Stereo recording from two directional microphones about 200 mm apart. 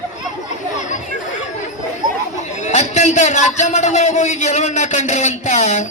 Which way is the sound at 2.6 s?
35° left (ahead or behind).